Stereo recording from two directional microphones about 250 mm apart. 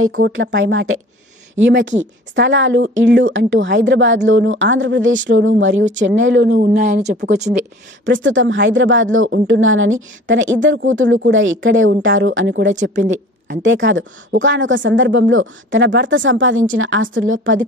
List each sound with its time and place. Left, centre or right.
0.3 s speech: right
6.5 s speech: right
8.0 s speech: right